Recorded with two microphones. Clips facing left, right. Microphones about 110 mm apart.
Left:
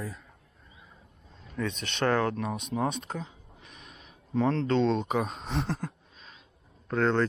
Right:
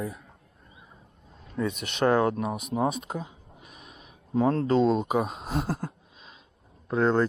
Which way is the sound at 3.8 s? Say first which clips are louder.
Right 2 dB; 5° right (ahead or behind).